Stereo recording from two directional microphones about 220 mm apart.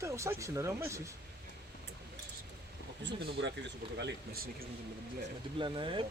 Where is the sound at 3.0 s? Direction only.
50° right (ahead or behind).